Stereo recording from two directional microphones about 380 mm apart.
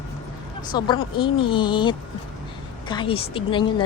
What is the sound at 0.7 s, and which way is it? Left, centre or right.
A woman's voice, centre.